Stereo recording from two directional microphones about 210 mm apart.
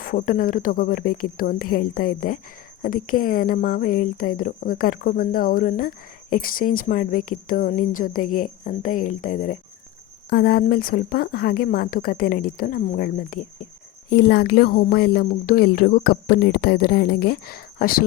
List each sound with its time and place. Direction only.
0.0 s a woman's voice: 40° left (ahead or behind)
10.2 s a woman's voice: 50° left (ahead or behind)